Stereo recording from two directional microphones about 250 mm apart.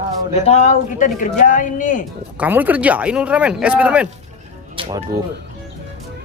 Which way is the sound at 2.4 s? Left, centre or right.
Centre.